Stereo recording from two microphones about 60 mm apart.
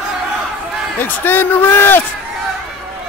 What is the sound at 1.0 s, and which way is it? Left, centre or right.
A man's voice, left.